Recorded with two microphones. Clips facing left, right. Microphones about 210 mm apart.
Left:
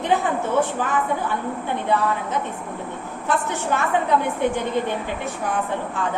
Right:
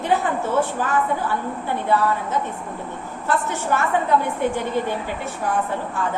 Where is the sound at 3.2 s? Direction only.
15° left (ahead or behind).